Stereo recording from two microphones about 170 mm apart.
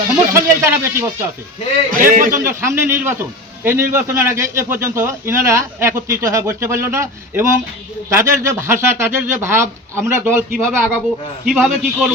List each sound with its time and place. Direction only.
0.3 s a man's voice: 15° right (ahead or behind)
1.9 s a man's voice: 55° right (ahead or behind)
2.3 s a man's voice: 15° right (ahead or behind)
11.4 s a man's voice: centre (ahead or behind)